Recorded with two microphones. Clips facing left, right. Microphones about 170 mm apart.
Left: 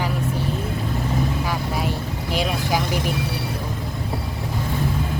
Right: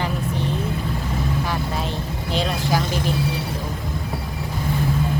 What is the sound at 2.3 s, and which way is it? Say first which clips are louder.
Speech: right 1 dB; 15° left (ahead or behind).